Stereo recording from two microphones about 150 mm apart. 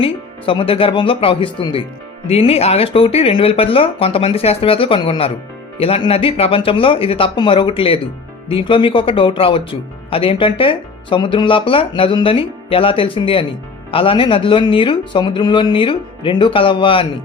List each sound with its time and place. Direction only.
0.0 s speech: 35° left (ahead or behind)